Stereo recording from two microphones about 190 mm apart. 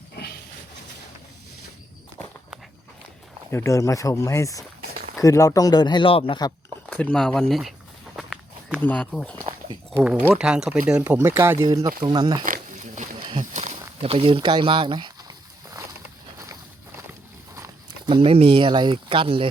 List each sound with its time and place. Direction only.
3.5 s speech: 15° left (ahead or behind)
6.9 s speech: 5° left (ahead or behind)
8.1 s walk: centre (ahead or behind)
8.8 s speech: 5° left (ahead or behind)
9.4 s a sound: 25° right (ahead or behind)
9.9 s speech: 5° right (ahead or behind); by 12.5 s 20° right (ahead or behind)
12.5 s wild animals: 40° right (ahead or behind); by 15.1 s 25° right (ahead or behind)
17.5 s a sound: 15° right (ahead or behind)
18.1 s speech: 30° right (ahead or behind)